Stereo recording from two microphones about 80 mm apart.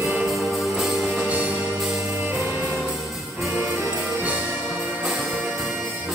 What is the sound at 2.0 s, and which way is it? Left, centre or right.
Music, right.